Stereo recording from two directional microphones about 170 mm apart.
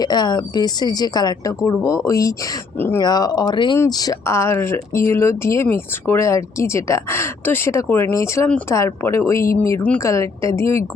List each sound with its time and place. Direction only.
0.0 s a woman's voice: 25° left (ahead or behind)